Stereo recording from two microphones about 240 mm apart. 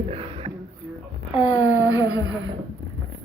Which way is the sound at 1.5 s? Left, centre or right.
Centre.